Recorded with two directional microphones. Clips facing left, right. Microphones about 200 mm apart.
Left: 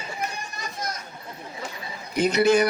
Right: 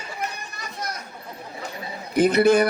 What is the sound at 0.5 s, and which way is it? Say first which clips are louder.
Children playing: even; 60° right (ahead or behind).